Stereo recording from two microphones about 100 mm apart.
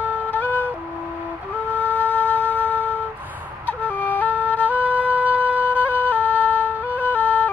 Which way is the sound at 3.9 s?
15° left (ahead or behind).